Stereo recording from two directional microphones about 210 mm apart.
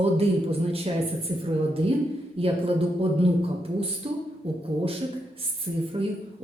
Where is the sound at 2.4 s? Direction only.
25° right (ahead or behind).